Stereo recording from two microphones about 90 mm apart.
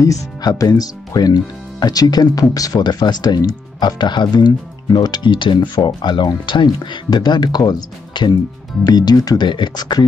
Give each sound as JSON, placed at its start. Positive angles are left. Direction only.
{"t": 0.0, "sound": "speech", "side_deg": 45}